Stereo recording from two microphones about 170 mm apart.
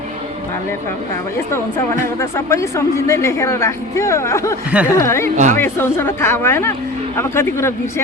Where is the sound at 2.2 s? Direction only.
15° left (ahead or behind).